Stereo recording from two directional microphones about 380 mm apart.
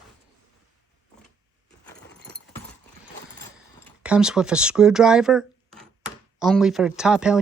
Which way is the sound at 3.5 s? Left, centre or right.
Centre.